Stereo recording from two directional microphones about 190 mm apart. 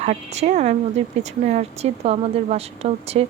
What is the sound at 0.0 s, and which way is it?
A woman's voice, 35° right (ahead or behind).